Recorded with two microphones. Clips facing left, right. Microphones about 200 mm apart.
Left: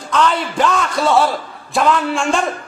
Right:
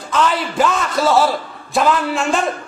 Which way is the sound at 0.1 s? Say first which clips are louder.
Left 1 dB; 5° right (ahead or behind).